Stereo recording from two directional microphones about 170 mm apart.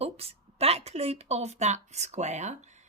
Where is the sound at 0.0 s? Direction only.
35° right (ahead or behind).